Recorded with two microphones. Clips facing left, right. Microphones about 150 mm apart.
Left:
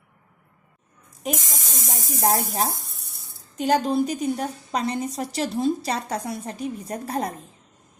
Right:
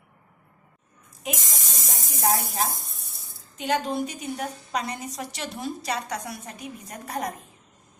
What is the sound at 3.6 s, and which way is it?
A woman's voice, 35° left (ahead or behind).